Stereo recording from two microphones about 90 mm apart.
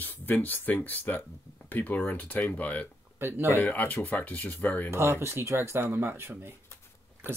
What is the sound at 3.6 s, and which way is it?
Speech, 20° left (ahead or behind).